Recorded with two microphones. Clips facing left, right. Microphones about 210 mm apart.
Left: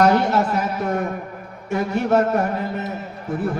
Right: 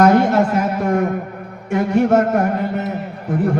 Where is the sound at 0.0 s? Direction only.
50° right (ahead or behind).